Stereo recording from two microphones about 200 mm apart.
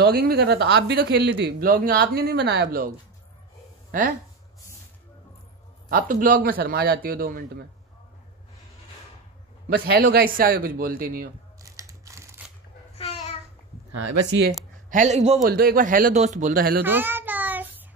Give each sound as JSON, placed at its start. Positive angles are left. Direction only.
{"t": 0.0, "sound": "speech", "side_deg": -50}
{"t": 3.9, "sound": "speech", "side_deg": -45}
{"t": 5.9, "sound": "speech", "side_deg": -45}
{"t": 9.7, "sound": "speech", "side_deg": -50}
{"t": 11.6, "sound": "crushing", "side_deg": -15}
{"t": 12.9, "sound": "a sound", "side_deg": 30}
{"t": 14.9, "sound": "speech", "side_deg": -35}
{"t": 15.4, "sound": "speech", "side_deg": -45}
{"t": 16.8, "sound": "child singing", "side_deg": -10}